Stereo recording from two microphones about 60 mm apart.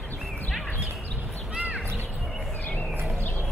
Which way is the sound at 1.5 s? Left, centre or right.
Centre.